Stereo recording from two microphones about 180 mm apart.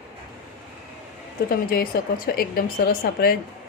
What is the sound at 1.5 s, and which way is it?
A woman's voice, 55° left (ahead or behind).